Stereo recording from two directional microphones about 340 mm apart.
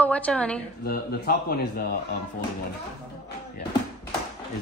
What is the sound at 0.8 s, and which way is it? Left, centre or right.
Speech, left.